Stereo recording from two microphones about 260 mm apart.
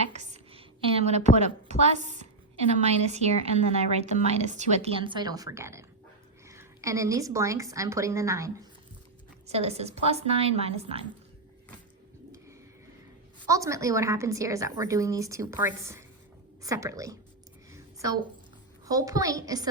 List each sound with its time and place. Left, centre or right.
0.1 s a sound: right
1.8 s a woman's voice: right; by 8.6 s centre
9.5 s speech: right
13.5 s a woman's voice: centre
17.7 s a sound: centre
18.9 s a woman's voice: centre